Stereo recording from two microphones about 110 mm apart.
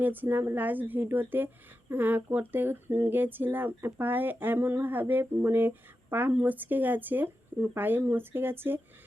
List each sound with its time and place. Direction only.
0.0 s speech: 15° right (ahead or behind)